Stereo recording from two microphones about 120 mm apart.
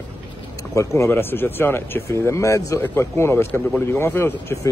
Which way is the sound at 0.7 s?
20° left (ahead or behind).